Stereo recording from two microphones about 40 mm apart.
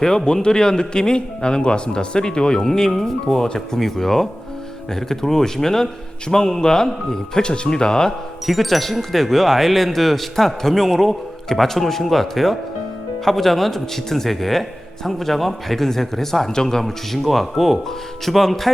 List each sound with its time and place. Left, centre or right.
0.4 s a man's voice: centre
8.4 s a man's voice: centre